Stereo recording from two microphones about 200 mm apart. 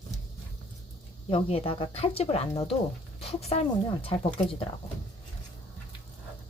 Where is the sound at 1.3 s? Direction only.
30° left (ahead or behind).